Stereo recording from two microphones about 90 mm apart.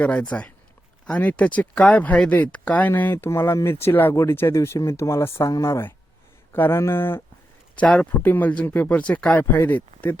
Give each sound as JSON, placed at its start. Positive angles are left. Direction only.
{"t": 0.0, "sound": "speech", "side_deg": 15}
{"t": 7.8, "sound": "speech", "side_deg": 15}